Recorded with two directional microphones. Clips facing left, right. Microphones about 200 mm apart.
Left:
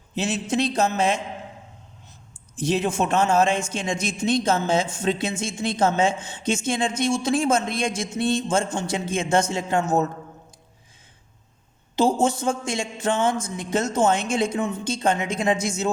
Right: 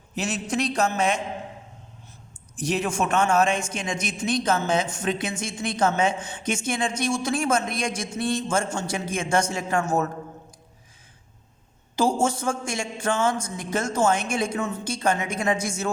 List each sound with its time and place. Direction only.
0.2 s a man's voice: 25° left (ahead or behind)
2.6 s a man's voice: 25° left (ahead or behind)
12.2 s a man's voice: 20° left (ahead or behind)